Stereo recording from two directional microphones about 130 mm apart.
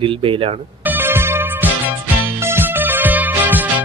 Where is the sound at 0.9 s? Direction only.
15° right (ahead or behind).